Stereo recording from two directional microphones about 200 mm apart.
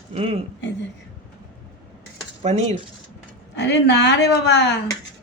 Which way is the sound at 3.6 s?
60° left (ahead or behind).